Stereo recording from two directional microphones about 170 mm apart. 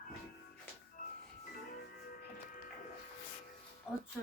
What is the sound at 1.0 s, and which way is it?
Music, 55° left (ahead or behind).